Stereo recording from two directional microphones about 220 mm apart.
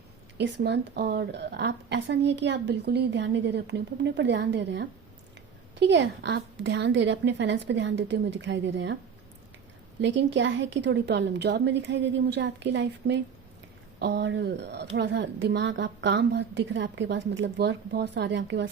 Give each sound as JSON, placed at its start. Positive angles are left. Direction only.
{"t": 0.3, "sound": "speech", "side_deg": -50}
{"t": 10.0, "sound": "speech", "side_deg": -55}